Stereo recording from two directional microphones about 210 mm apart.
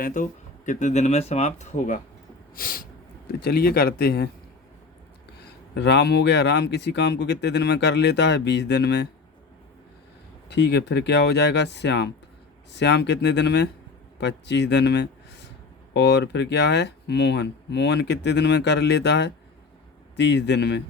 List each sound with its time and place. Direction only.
0.0 s speech: 35° left (ahead or behind)
5.7 s speech: 55° left (ahead or behind)
10.5 s speech: 55° left (ahead or behind)